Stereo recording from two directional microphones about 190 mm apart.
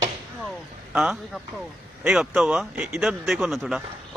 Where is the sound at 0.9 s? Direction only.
5° right (ahead or behind).